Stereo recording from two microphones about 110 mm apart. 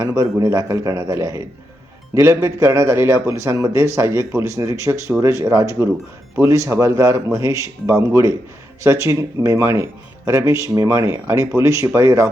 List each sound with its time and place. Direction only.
0.0 s speech: 25° right (ahead or behind)